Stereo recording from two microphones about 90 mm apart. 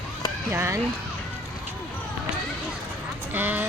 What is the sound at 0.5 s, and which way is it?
Speech, 30° right (ahead or behind).